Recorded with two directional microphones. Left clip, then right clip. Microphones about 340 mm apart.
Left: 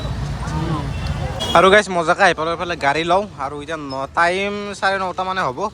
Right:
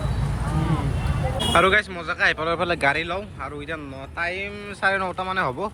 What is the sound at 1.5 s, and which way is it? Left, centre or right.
Speech, centre.